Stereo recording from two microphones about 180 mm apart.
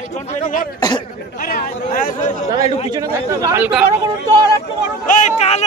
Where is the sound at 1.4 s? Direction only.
50° left (ahead or behind).